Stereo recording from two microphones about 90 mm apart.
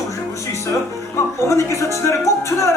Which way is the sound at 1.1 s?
35° left (ahead or behind).